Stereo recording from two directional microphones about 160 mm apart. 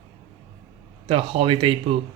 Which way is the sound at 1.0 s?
35° right (ahead or behind).